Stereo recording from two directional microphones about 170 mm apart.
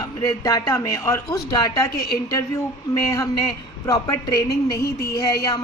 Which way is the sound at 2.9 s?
20° left (ahead or behind).